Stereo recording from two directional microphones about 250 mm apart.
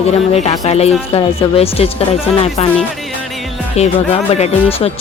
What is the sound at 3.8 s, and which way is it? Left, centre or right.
Speech, left.